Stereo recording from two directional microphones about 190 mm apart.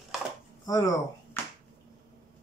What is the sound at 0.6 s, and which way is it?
Speech, 20° left (ahead or behind).